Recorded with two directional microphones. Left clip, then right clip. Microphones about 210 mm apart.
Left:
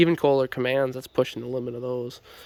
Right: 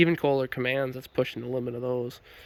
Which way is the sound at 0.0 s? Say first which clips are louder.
Left 4 dB; 15° left (ahead or behind).